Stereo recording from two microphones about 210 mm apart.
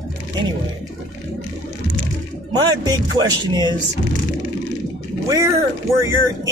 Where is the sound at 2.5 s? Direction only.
20° right (ahead or behind).